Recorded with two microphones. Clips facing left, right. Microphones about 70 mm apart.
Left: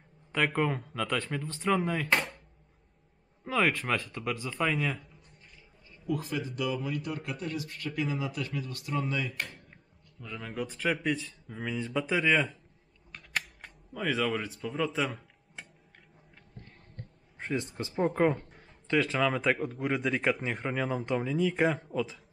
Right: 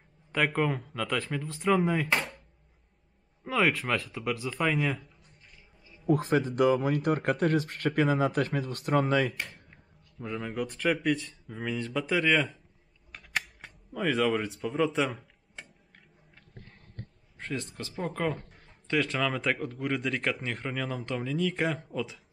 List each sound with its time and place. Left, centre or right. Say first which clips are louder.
0.3 s speech: right 1 dB; centre
3.4 s speech: right 1 dB; centre
6.0 s speech: right 7 dB; right
9.4 s a sound: left 1 dB; centre
10.4 s speech: right 2 dB; centre
13.1 s camera: right 1 dB; centre
17.4 s a sound: left 2 dB; centre
17.9 s speech: left 5 dB; left
18.5 s speech: left 1 dB; centre